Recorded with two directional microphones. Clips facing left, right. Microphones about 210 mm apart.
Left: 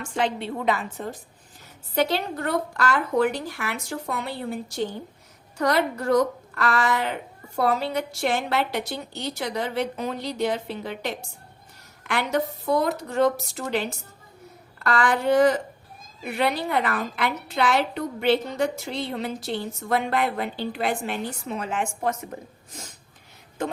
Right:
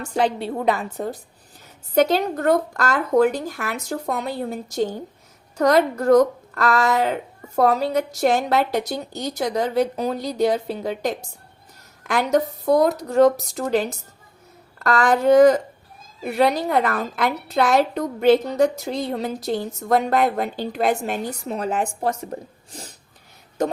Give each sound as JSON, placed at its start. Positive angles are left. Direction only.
{"t": 0.0, "sound": "a woman's voice", "side_deg": -40}